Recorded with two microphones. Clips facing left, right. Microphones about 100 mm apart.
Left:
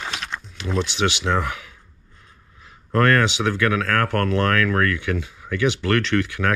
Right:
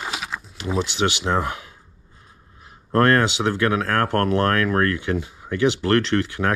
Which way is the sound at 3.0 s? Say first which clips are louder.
Right 1 dB; 25° right (ahead or behind).